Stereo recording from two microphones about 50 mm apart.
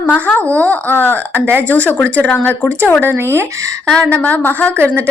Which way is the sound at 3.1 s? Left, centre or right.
Right.